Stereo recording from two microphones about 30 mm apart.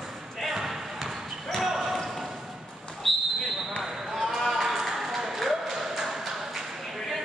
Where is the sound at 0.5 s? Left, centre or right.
Centre.